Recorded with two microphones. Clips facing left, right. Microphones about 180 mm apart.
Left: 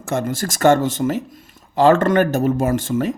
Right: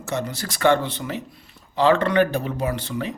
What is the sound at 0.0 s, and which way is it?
Speech, 50° left (ahead or behind).